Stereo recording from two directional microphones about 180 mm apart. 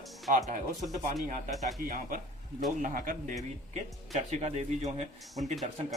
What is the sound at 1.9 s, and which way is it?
Speech, 50° right (ahead or behind).